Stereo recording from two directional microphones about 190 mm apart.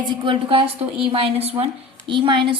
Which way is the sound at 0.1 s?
25° right (ahead or behind).